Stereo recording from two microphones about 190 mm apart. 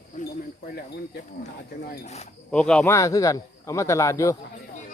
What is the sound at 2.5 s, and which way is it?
A man's voice, 5° left (ahead or behind).